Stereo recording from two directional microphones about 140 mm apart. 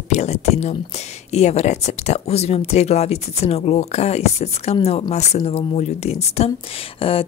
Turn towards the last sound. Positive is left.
turn(degrees=40)  # may be behind; listen again after turning